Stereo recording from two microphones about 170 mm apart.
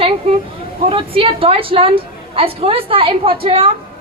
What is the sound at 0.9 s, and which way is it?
A woman's voice, 30° right (ahead or behind).